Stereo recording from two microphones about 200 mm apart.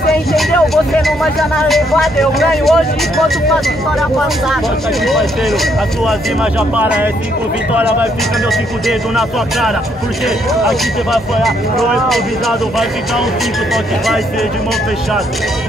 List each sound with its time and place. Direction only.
0.9 s speech: centre (ahead or behind)
6.8 s speech: 10° right (ahead or behind)
8.5 s speech: centre (ahead or behind)